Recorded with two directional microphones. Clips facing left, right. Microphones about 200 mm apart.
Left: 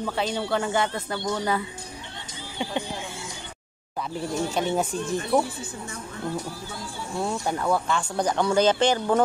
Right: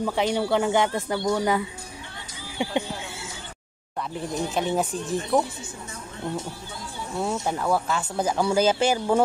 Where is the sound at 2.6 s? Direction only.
15° right (ahead or behind).